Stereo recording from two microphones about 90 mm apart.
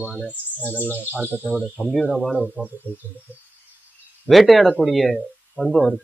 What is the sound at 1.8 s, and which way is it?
Speech, centre (ahead or behind).